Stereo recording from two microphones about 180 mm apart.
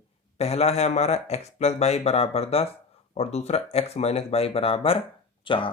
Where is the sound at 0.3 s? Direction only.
35° left (ahead or behind).